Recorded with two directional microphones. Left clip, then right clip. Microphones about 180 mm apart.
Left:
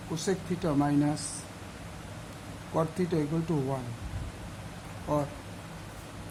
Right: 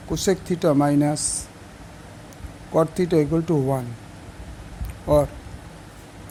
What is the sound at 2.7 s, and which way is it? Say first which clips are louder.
Speech: right 10 dB; 45° right (ahead or behind).